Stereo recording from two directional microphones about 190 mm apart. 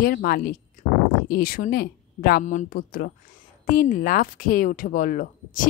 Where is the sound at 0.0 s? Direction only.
50° left (ahead or behind).